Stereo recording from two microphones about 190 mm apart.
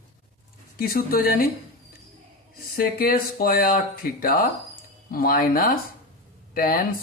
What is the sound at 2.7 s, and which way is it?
Speech, 50° left (ahead or behind).